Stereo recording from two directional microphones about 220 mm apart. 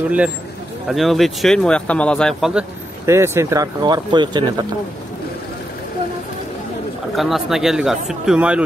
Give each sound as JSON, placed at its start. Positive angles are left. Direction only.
{"t": 0.8, "sound": "speech", "side_deg": 0}
{"t": 3.1, "sound": "speech", "side_deg": -10}
{"t": 7.2, "sound": "speech", "side_deg": 0}